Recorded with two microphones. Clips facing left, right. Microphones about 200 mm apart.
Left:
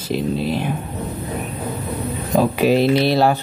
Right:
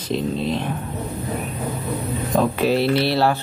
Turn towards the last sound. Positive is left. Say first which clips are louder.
# left 3 dB
turn(degrees=15)  # may be behind; listen again after turning